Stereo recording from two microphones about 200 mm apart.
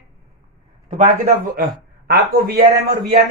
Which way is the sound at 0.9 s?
35° right (ahead or behind).